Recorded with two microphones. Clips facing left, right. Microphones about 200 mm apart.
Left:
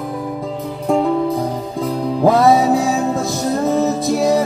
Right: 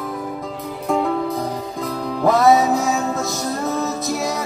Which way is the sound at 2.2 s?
30° left (ahead or behind).